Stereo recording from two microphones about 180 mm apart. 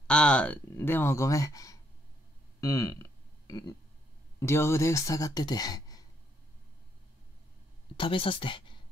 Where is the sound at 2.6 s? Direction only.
15° left (ahead or behind).